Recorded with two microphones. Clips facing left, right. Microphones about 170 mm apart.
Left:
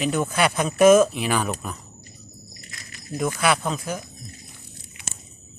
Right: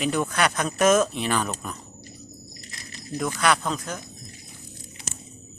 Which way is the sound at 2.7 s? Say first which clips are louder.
Even; 35° right (ahead or behind).